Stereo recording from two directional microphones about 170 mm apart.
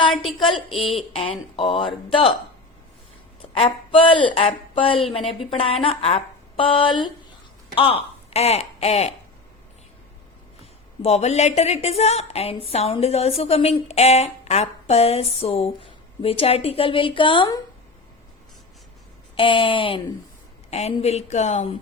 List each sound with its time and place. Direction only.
0.1 s a sound: centre (ahead or behind)
1.1 s a woman's voice: 35° left (ahead or behind)
3.5 s a man's voice: 30° left (ahead or behind)
11.0 s a woman's voice: 40° left (ahead or behind)
19.4 s a woman's voice: 30° left (ahead or behind)